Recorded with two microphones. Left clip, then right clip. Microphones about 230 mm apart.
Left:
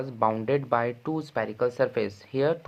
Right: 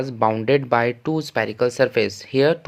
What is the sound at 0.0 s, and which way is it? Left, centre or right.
Speech, right.